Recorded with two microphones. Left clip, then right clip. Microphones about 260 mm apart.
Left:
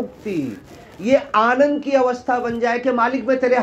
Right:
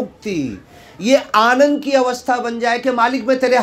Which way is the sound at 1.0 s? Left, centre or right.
Right.